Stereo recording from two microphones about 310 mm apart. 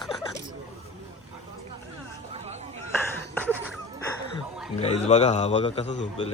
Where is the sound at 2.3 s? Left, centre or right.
Right.